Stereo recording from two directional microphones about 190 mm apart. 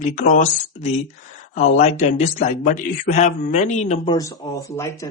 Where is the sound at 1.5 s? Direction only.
35° left (ahead or behind).